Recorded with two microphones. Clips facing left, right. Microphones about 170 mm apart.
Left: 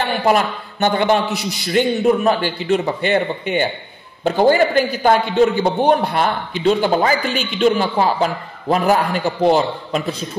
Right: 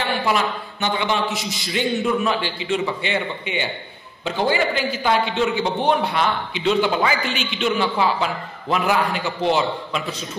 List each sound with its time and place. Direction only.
0.0 s a man's voice: 50° left (ahead or behind)